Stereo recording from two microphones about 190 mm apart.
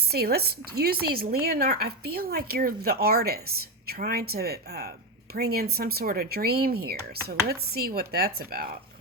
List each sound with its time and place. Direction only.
0.1 s speech: 55° right (ahead or behind)